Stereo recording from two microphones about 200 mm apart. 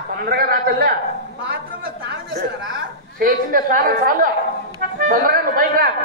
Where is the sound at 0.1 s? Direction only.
50° right (ahead or behind).